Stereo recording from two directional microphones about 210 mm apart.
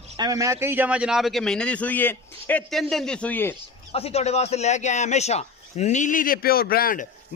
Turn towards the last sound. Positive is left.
turn(degrees=45)  # may be behind; listen again after turning